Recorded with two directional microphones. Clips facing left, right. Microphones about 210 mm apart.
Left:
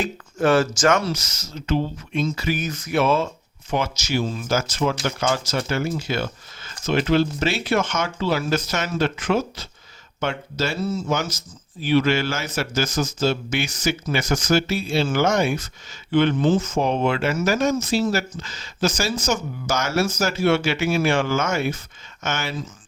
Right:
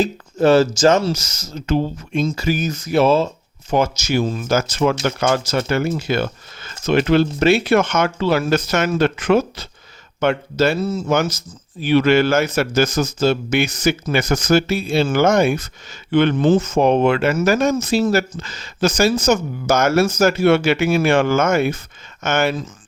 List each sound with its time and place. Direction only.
0.0 s speech: 35° right (ahead or behind)
1.2 s speech: 45° right (ahead or behind)
3.7 s speech: 45° right (ahead or behind)